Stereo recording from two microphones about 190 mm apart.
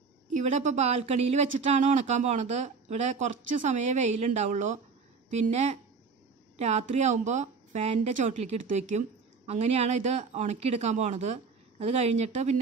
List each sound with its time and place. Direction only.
0.3 s speech: 40° right (ahead or behind)